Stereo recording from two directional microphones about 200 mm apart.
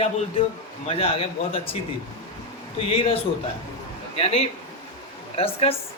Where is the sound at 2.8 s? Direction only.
30° left (ahead or behind).